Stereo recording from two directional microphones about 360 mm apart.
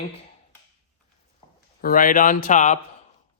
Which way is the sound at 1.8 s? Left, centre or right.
Left.